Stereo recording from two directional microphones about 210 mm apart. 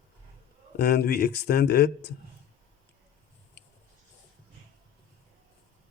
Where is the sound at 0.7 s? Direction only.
50° left (ahead or behind).